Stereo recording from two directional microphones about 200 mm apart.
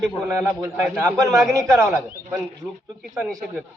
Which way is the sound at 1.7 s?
Centre (ahead or behind).